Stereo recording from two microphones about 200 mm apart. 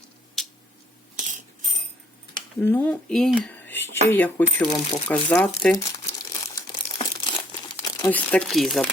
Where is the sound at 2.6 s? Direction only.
10° left (ahead or behind).